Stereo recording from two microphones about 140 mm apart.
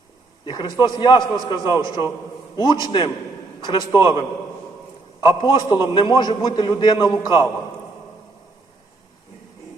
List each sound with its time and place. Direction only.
0.4 s a man's voice: 30° left (ahead or behind)
2.8 s a man's voice: 35° left (ahead or behind)